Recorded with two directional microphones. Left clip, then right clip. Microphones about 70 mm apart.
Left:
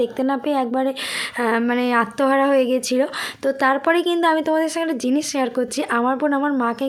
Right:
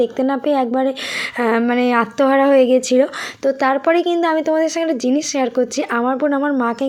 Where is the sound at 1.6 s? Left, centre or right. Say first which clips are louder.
Right 3 dB; centre.